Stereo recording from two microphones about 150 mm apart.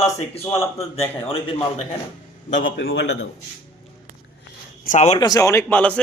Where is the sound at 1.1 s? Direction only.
35° left (ahead or behind).